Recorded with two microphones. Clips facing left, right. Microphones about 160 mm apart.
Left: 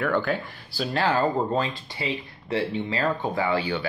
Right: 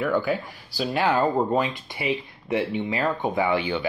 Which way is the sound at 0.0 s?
10° right (ahead or behind).